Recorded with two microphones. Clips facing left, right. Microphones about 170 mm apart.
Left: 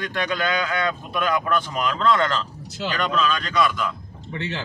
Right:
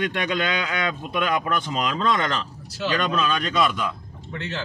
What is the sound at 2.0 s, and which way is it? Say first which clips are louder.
Speech: left 6 dB; 20° right (ahead or behind).